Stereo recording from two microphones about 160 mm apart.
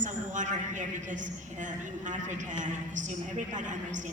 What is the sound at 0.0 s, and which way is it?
A woman's voice, 50° right (ahead or behind).